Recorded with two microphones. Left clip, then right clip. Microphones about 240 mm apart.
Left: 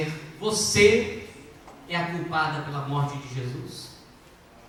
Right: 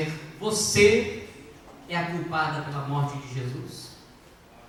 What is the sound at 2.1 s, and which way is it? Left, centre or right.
Speech, centre.